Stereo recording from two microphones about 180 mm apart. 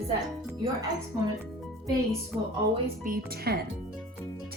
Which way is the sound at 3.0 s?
55° right (ahead or behind).